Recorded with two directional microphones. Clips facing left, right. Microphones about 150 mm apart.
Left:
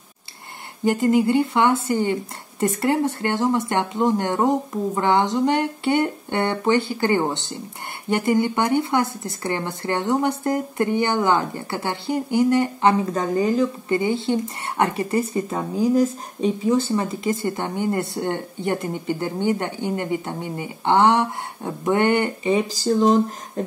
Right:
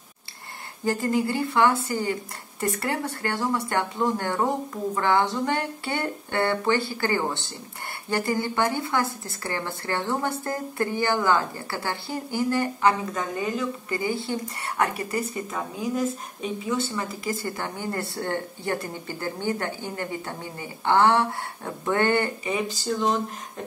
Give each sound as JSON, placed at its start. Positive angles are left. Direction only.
{"t": 0.8, "sound": "speech", "side_deg": 20}
{"t": 13.1, "sound": "a woman's voice", "side_deg": 35}
{"t": 13.9, "sound": "speech", "side_deg": 20}